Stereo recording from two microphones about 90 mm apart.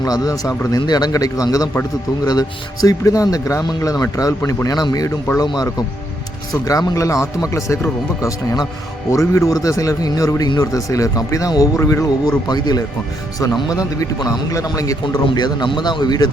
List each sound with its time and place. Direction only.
0.0 s a man's voice: 45° left (ahead or behind)
15.1 s a man's voice: 55° left (ahead or behind)